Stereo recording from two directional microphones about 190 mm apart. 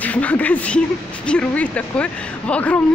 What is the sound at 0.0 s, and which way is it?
Speech, 10° left (ahead or behind).